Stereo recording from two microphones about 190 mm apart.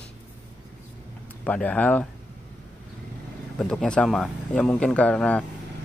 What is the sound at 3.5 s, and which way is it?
Speech, 5° left (ahead or behind).